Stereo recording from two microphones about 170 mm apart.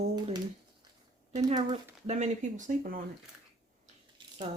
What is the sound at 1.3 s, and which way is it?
Speech, 40° right (ahead or behind).